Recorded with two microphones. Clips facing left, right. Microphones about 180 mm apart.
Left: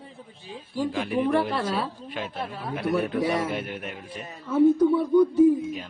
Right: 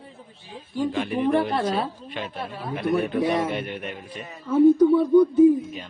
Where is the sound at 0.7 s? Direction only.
5° left (ahead or behind).